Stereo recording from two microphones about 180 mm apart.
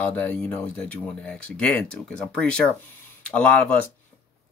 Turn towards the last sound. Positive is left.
turn(degrees=5)  # may be behind; listen again after turning